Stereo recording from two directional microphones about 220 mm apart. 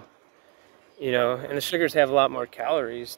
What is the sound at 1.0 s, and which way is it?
Speech, centre (ahead or behind).